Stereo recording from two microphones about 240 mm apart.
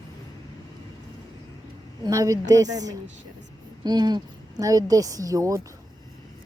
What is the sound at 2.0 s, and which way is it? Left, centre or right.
A woman's voice, centre.